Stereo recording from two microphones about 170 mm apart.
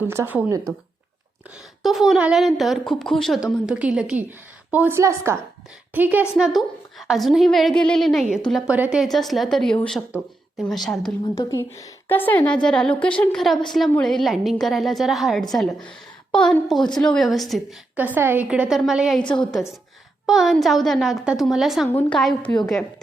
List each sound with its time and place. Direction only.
0.1 s a woman's voice: 15° right (ahead or behind)
1.8 s a woman's voice: centre (ahead or behind)
11.3 s a woman's voice: 20° left (ahead or behind); by 19.2 s centre (ahead or behind)
19.2 s a woman's voice: 25° left (ahead or behind)
20.2 s a woman's voice: centre (ahead or behind)
21.8 s a woman's voice: 10° left (ahead or behind)